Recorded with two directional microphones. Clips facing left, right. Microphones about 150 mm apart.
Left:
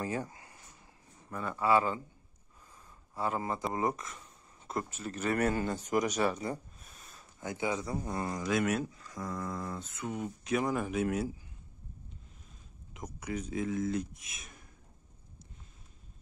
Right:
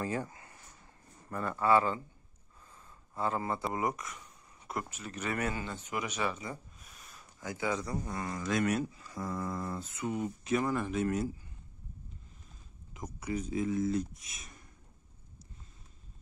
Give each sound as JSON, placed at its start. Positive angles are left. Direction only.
{"t": 0.0, "sound": "a sound", "side_deg": 20}
{"t": 1.3, "sound": "a man's voice", "side_deg": 5}
{"t": 3.2, "sound": "a man's voice", "side_deg": 15}
{"t": 8.5, "sound": "speech", "side_deg": 0}
{"t": 10.6, "sound": "a man's voice", "side_deg": 10}
{"t": 12.9, "sound": "speech", "side_deg": 0}